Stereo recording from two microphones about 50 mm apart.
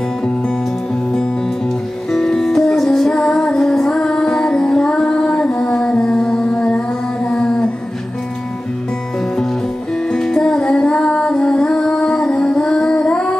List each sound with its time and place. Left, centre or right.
2.1 s music: centre
3.2 s music: centre
7.2 s mantra: centre
10.1 s music: centre